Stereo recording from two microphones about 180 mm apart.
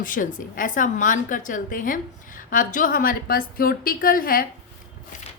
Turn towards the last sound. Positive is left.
turn(degrees=50)  # may be behind; listen again after turning